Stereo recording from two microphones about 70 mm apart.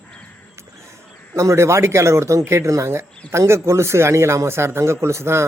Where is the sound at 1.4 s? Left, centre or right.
Right.